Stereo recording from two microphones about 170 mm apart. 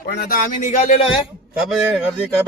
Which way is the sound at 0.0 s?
60° left (ahead or behind).